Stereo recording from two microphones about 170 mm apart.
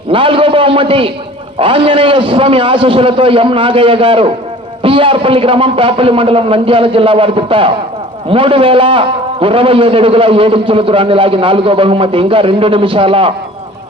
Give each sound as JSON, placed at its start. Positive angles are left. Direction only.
{"t": 0.1, "sound": "a man's voice", "side_deg": -30}